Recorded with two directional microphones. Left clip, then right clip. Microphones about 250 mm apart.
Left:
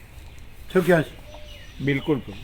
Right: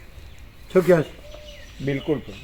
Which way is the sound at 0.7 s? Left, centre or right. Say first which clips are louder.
Right 2 dB; centre.